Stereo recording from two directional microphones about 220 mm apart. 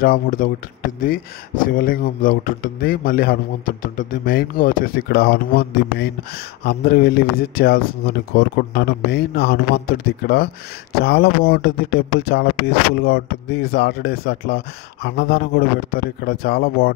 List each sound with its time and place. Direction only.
0.0 s a man's voice: 40° left (ahead or behind)
1.7 s a man's voice: 40° left (ahead or behind)